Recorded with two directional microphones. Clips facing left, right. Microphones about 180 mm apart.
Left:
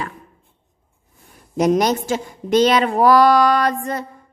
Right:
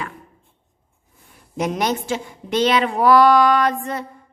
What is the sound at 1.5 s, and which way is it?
Speech, 40° left (ahead or behind).